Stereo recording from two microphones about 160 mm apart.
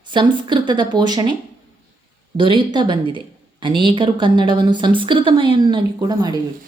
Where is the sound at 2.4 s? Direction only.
30° right (ahead or behind).